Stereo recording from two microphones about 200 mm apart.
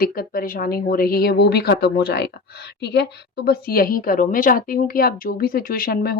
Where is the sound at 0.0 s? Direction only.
45° left (ahead or behind).